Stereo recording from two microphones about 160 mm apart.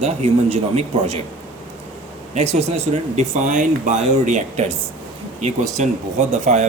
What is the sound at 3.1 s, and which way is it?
Speech, 50° right (ahead or behind).